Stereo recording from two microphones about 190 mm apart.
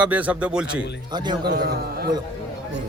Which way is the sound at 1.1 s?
25° right (ahead or behind).